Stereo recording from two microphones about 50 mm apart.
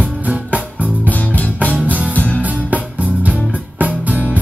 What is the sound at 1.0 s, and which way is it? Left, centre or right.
Music, left.